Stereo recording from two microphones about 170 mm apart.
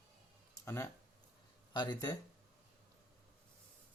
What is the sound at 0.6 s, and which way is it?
Speech, 15° left (ahead or behind).